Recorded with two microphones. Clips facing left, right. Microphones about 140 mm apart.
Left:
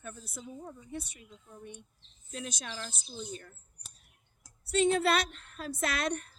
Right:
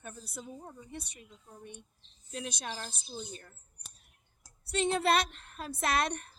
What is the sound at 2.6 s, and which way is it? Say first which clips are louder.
Speech: right 1 dB; 35° right (ahead or behind).